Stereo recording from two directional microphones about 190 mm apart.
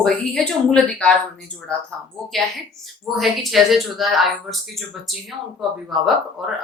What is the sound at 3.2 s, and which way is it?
Speech, centre (ahead or behind).